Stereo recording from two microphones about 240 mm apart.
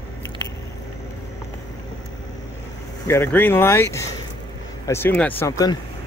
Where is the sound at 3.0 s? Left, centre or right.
Centre.